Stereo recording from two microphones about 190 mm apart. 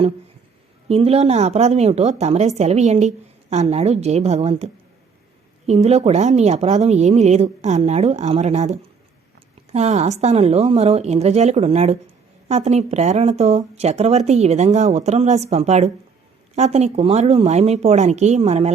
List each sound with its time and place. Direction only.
0.9 s speech: 30° right (ahead or behind)